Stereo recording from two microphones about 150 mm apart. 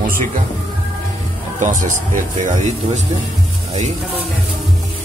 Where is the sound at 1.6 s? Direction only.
60° right (ahead or behind).